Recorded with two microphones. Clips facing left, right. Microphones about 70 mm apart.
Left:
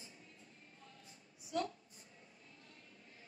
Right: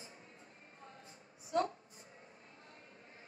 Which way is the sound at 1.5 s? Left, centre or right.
Right.